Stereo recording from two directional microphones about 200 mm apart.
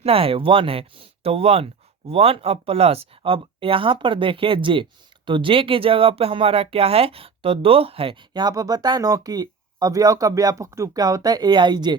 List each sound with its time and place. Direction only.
0.0 s speech: 30° right (ahead or behind)